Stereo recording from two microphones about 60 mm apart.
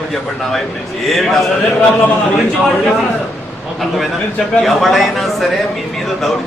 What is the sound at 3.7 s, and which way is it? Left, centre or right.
A man's voice, centre.